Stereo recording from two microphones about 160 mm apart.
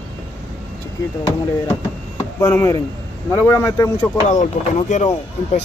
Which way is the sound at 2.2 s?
20° left (ahead or behind).